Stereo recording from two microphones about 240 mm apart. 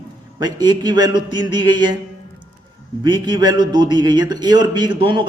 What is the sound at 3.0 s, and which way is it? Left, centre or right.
A man's voice, centre.